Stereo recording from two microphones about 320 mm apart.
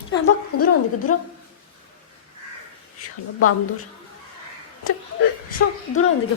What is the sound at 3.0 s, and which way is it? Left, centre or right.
Speech, left.